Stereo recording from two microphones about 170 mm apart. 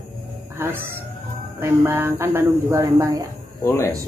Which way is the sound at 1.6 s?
15° right (ahead or behind).